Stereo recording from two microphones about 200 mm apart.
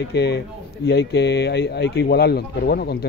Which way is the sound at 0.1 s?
55° left (ahead or behind).